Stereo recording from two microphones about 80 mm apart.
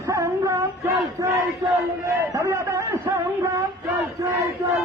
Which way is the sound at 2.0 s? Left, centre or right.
Right.